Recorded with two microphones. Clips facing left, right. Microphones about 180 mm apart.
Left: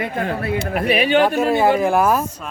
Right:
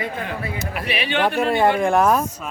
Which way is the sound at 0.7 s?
45° left (ahead or behind).